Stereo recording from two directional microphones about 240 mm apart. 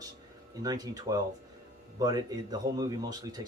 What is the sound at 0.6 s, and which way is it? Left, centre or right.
Speech, centre.